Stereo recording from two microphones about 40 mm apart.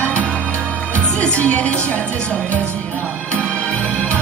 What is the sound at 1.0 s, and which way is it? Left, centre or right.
Speech, left.